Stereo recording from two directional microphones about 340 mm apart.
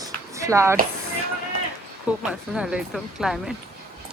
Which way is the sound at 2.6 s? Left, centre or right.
Centre.